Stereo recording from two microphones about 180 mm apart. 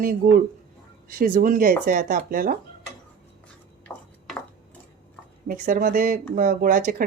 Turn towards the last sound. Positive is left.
turn(degrees=-50)  # may be behind; listen again after turning